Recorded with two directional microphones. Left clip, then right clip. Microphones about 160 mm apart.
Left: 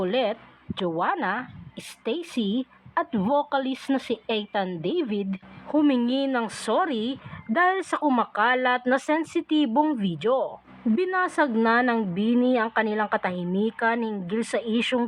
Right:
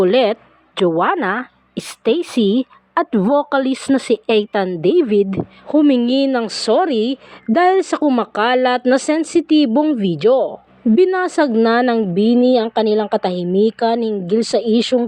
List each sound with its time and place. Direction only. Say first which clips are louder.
0.0 s a woman's voice: right 11 dB; 45° right (ahead or behind)
5.7 s a woman's voice: right 9 dB; 25° right (ahead or behind)